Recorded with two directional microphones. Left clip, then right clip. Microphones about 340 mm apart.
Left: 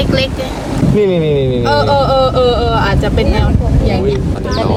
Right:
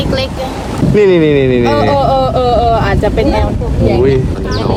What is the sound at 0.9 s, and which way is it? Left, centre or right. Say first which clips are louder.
Speech: right 5 dB; right.